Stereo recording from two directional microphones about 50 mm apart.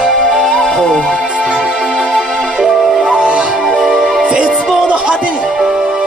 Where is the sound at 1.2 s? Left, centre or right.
Right.